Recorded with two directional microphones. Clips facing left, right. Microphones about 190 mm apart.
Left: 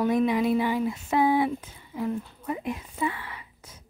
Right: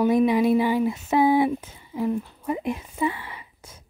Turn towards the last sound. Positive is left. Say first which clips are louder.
# right 1 dB
turn(degrees=-25)  # may be behind; listen again after turning